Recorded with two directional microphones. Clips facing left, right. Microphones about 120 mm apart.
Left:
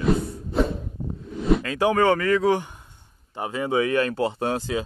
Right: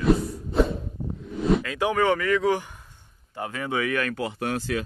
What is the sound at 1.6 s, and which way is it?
Speech, 35° left (ahead or behind).